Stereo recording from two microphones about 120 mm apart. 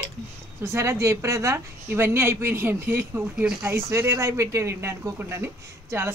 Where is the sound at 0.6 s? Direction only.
25° right (ahead or behind).